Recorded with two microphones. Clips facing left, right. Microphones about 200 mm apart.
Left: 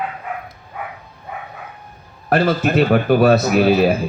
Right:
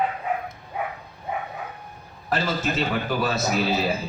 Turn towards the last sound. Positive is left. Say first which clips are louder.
# left 9 dB
turn(degrees=60)  # may be behind; listen again after turning